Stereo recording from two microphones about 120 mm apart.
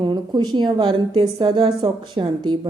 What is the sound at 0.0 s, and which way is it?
A woman's voice, 40° right (ahead or behind).